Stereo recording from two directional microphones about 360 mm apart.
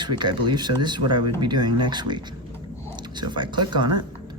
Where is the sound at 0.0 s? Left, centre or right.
Centre.